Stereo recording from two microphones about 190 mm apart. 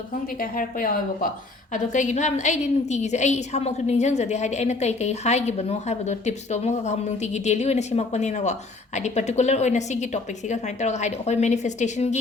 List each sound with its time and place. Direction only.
0.3 s a woman's voice: 50° left (ahead or behind)